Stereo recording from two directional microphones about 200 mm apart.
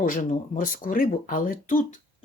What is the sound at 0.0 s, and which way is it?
Speech, 40° left (ahead or behind).